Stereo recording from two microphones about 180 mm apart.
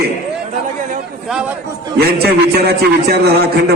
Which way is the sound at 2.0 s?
60° right (ahead or behind).